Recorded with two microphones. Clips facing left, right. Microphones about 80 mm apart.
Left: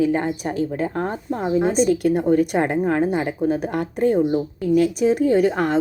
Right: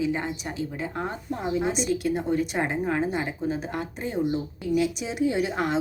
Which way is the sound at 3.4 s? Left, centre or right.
Left.